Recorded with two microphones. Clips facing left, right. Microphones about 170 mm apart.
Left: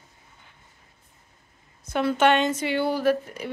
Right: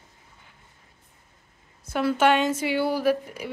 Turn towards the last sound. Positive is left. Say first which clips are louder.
# left 1 dB
turn(degrees=-10)  # may be behind; listen again after turning